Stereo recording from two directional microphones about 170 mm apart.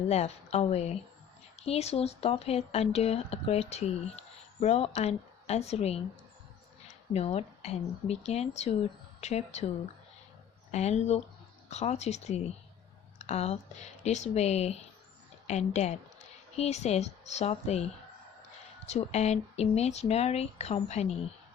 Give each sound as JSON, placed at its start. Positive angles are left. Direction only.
{"t": 0.1, "sound": "speech", "side_deg": 40}
{"t": 10.7, "sound": "a woman's voice", "side_deg": 40}
{"t": 18.9, "sound": "speech", "side_deg": 40}